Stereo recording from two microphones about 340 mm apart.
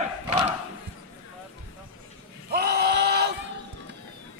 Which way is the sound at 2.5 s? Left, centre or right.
Right.